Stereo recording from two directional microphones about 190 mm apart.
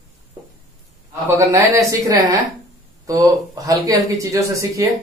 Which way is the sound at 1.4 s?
15° right (ahead or behind).